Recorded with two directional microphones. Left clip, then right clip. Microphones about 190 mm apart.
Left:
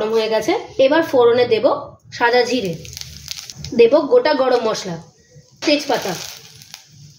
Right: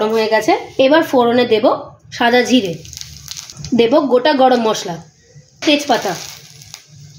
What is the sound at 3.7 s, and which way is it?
A woman's voice, 50° right (ahead or behind).